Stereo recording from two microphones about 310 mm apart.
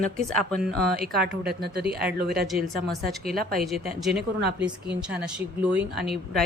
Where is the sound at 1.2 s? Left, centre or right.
Right.